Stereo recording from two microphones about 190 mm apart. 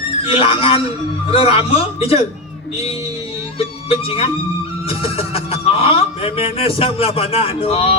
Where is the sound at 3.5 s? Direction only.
30° left (ahead or behind).